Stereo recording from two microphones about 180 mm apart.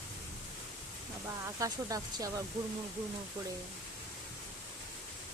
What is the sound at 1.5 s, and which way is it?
Speech, 20° right (ahead or behind).